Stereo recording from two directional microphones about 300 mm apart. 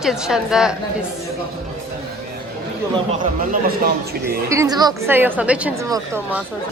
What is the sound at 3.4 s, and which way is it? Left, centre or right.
Speech, right.